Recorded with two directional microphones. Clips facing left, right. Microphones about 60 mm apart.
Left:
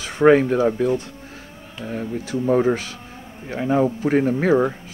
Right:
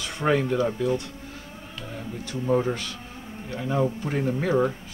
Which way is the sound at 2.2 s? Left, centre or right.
Left.